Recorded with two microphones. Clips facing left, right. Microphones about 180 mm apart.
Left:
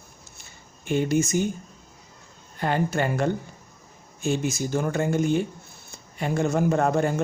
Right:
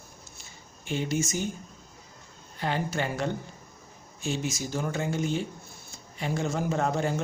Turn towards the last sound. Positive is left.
turn(degrees=55)  # may be behind; listen again after turning